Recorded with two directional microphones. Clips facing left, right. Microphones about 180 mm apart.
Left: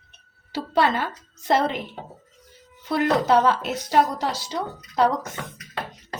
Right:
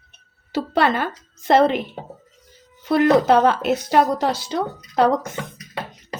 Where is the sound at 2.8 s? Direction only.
60° right (ahead or behind).